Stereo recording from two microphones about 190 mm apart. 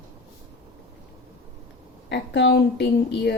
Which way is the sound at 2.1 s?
60° left (ahead or behind).